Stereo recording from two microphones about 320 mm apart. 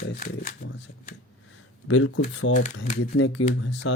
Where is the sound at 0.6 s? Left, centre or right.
Left.